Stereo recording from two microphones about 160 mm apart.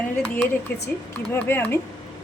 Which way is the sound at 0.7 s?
90° left.